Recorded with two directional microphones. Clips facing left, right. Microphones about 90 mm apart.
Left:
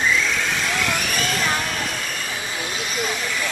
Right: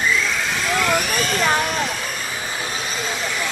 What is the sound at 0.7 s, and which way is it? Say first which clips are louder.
Vehicle: right 4 dB; centre (ahead or behind).